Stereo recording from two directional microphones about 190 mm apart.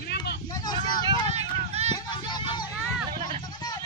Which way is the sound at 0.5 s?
20° left (ahead or behind).